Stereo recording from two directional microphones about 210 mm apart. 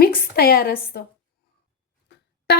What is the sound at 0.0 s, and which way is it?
A woman's voice, 45° left (ahead or behind).